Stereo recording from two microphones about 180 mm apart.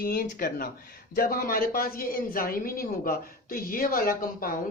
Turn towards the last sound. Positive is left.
turn(degrees=50)  # may be behind; listen again after turning